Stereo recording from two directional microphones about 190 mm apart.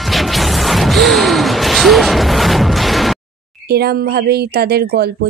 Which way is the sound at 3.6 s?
55° right (ahead or behind).